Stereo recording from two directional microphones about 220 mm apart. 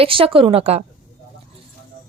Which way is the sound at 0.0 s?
25° right (ahead or behind).